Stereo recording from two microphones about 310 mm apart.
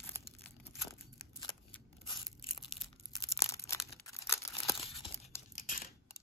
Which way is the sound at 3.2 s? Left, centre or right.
Centre.